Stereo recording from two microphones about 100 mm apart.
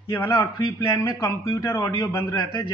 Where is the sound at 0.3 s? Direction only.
50° left (ahead or behind).